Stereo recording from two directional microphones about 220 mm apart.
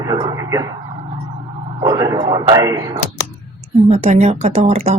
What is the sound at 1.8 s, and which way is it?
Speech, 20° right (ahead or behind).